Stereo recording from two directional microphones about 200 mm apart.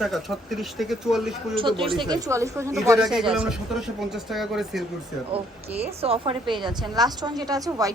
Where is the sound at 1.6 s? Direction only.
25° right (ahead or behind).